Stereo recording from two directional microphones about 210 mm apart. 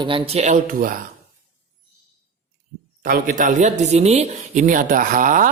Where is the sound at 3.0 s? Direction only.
40° right (ahead or behind).